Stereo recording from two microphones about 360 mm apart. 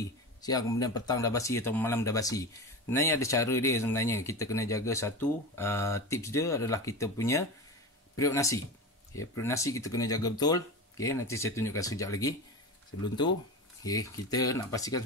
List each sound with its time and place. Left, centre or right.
0.0 s speech: centre